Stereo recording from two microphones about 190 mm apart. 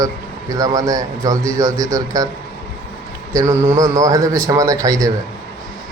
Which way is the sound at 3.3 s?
15° right (ahead or behind).